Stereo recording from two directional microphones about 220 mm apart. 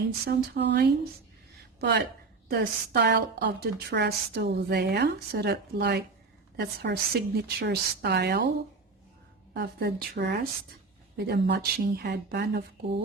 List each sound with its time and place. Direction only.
0.3 s a woman's voice: 50° right (ahead or behind)
9.6 s a woman's voice: 50° right (ahead or behind)